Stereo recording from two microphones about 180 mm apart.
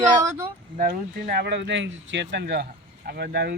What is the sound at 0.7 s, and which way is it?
Speech, 55° right (ahead or behind).